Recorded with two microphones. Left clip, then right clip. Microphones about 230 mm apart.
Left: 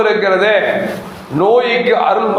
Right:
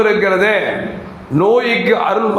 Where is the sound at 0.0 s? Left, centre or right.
Right.